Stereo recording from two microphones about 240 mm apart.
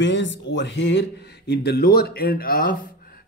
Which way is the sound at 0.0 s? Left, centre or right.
Left.